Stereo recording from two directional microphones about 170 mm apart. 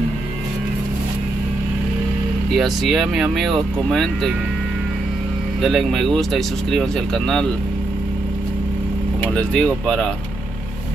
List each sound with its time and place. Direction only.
2.5 s speech: centre (ahead or behind)
5.6 s speech: centre (ahead or behind)
9.3 s speech: 5° left (ahead or behind)